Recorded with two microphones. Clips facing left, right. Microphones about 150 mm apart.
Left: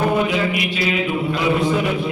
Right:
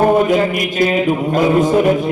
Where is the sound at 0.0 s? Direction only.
45° right (ahead or behind).